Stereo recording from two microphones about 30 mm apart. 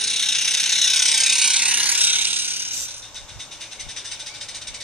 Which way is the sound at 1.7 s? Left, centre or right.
Right.